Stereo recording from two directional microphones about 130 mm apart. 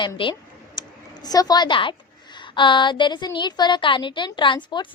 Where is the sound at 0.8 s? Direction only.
30° left (ahead or behind).